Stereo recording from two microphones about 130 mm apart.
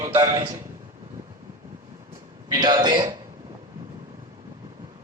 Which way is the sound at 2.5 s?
30° right (ahead or behind).